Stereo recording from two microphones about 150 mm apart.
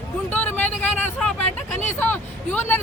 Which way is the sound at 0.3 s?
10° left (ahead or behind).